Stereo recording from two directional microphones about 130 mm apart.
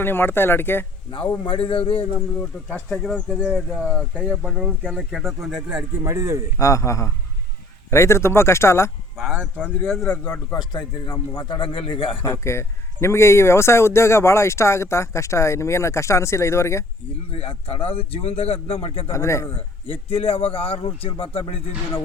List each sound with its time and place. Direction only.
0.0 s speech: 15° left (ahead or behind)
1.5 s speech: 45° left (ahead or behind)
2.6 s speech: 5° left (ahead or behind); by 4.4 s 10° right (ahead or behind)
4.4 s speech: centre (ahead or behind)
6.0 s a man's voice: 25° right (ahead or behind)
6.6 s speech: 25° left (ahead or behind)
9.1 s speech: centre (ahead or behind)
10.1 s speech: 15° left (ahead or behind)
10.7 s a man's voice: 35° left (ahead or behind)
12.2 s speech: 20° left (ahead or behind)
17.3 s speech: 50° left (ahead or behind)
19.1 s speech: 20° left (ahead or behind)
19.5 s speech: 45° left (ahead or behind)